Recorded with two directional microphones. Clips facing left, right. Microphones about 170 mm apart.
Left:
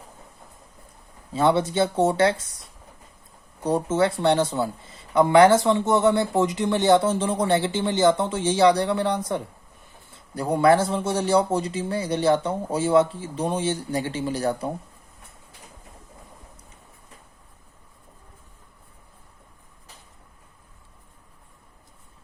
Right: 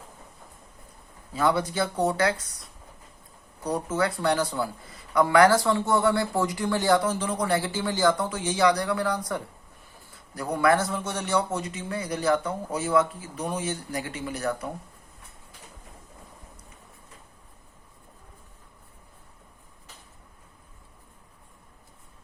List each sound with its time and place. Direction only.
1.3 s speech: 25° left (ahead or behind)
3.6 s speech: 25° left (ahead or behind)